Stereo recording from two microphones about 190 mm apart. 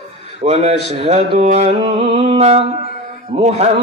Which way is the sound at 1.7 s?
30° right (ahead or behind).